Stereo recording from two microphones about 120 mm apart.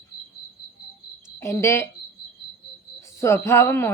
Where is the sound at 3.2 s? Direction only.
20° left (ahead or behind).